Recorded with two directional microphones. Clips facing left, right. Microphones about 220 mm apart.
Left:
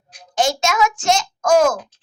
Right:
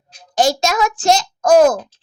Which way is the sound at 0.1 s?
35° right (ahead or behind).